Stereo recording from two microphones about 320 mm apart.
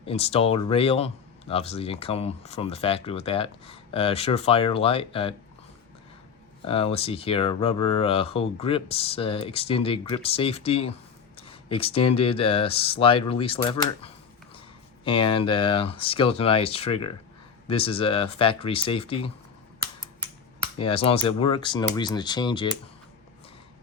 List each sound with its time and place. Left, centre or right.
0.0 s speech: centre
6.7 s speech: centre
15.0 s speech: centre
20.7 s speech: centre